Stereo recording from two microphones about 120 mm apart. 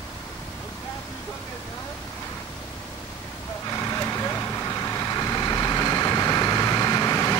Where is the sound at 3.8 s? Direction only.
25° left (ahead or behind).